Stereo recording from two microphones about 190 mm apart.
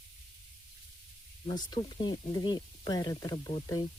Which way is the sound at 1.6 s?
25° left (ahead or behind).